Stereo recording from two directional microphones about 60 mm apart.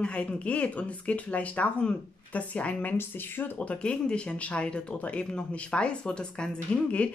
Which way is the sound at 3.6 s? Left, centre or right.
Centre.